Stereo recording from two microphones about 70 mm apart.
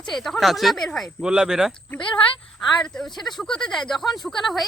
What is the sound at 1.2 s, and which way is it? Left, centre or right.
Speech, centre.